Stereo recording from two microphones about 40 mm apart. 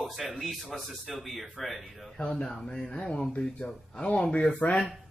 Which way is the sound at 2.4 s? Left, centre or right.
Centre.